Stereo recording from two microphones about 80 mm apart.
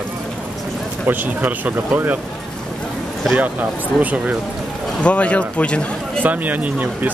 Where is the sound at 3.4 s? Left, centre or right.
Centre.